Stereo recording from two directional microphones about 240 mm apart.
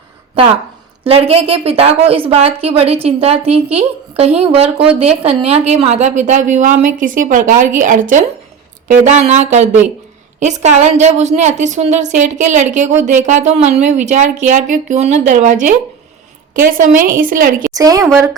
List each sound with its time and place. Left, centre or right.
1.0 s a woman's voice: right
17.7 s a woman's voice: centre
18.0 s speech: centre